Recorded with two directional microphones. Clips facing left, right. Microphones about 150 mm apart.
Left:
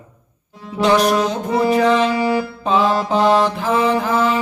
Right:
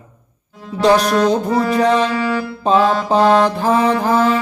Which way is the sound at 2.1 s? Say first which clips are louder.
Left 1 dB; 15° left (ahead or behind).